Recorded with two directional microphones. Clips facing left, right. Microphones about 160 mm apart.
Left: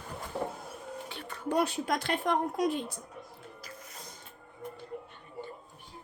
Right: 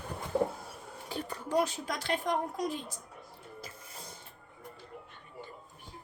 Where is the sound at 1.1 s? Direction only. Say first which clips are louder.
Right 5 dB; 40° right (ahead or behind).